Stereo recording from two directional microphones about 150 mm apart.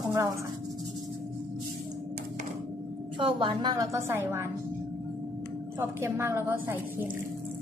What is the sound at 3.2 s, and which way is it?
A woman's voice, 35° right (ahead or behind).